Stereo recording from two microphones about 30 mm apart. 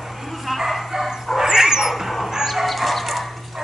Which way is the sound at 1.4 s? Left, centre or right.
Centre.